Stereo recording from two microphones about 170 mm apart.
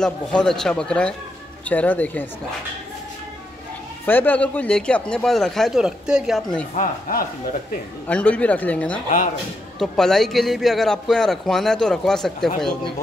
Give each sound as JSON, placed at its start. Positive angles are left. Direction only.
{"t": 0.0, "sound": "speech", "side_deg": 5}
{"t": 4.0, "sound": "speech", "side_deg": 10}
{"t": 6.7, "sound": "speech", "side_deg": 55}
{"t": 8.1, "sound": "speech", "side_deg": 10}